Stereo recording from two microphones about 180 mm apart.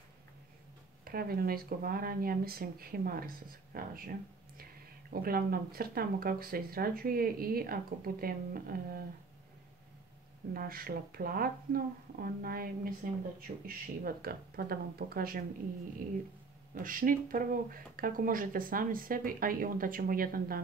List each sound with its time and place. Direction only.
1.0 s speech: 55° right (ahead or behind)
5.2 s speech: 55° right (ahead or behind)
10.5 s speech: 55° right (ahead or behind)
16.7 s speech: 50° right (ahead or behind)